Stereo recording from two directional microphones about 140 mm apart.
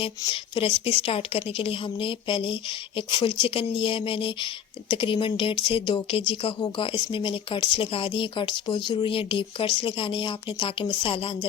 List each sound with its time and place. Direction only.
0.3 s speech: 40° left (ahead or behind)